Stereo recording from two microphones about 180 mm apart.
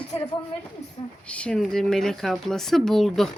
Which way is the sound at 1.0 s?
30° left (ahead or behind).